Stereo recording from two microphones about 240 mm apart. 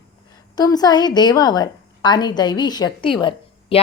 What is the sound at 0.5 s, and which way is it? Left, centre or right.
A woman's voice, centre.